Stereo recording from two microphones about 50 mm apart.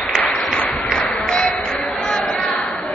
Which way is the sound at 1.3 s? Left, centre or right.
Centre.